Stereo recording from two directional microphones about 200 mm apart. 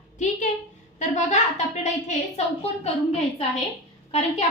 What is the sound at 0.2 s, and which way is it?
A woman's voice, 35° left (ahead or behind).